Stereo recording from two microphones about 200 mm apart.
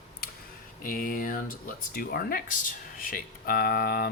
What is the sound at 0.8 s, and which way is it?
Speech, 45° left (ahead or behind).